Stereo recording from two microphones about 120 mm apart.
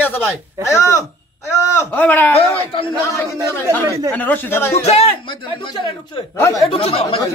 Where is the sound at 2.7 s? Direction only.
45° left (ahead or behind).